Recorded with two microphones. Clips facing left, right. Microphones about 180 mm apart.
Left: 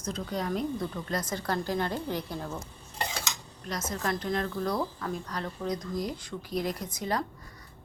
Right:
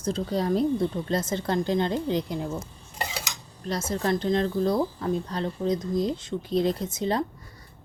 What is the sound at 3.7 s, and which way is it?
A woman's voice, 30° right (ahead or behind).